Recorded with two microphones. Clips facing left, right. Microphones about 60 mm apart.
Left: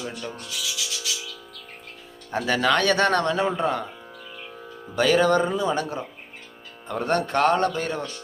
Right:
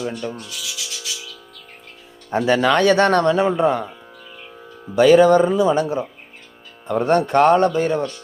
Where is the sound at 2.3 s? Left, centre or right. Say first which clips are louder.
Right 5 dB; centre.